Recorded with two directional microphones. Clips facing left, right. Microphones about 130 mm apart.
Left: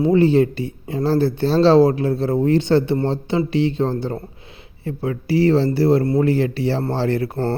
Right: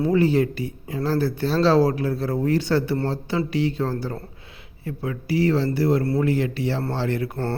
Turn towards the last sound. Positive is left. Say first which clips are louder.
# left 5 dB
turn(degrees=30)  # may be behind; listen again after turning